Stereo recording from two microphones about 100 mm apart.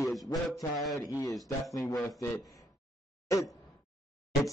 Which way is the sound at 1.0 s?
35° left (ahead or behind).